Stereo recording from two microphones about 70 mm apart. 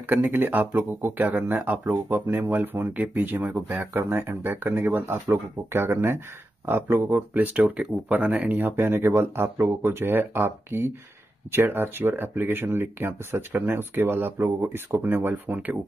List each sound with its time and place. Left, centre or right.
0.0 s speech: right
7.5 s speech: centre